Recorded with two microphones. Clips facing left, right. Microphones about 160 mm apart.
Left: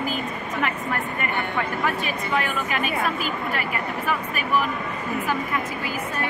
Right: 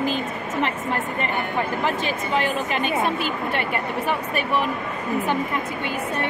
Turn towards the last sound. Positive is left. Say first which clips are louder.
# right 2 dB
turn(degrees=-25)  # may be behind; listen again after turning